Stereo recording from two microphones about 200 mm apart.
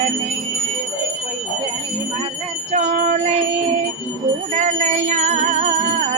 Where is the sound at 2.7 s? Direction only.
35° right (ahead or behind).